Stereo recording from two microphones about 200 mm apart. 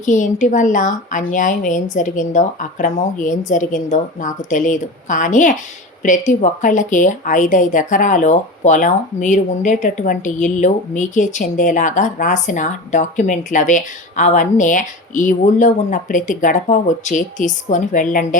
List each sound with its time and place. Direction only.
0.0 s a woman's voice: 40° left (ahead or behind)